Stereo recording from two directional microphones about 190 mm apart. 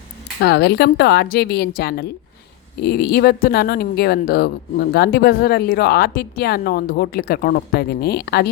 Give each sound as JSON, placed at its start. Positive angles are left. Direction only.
{"t": 0.3, "sound": "speech", "side_deg": 60}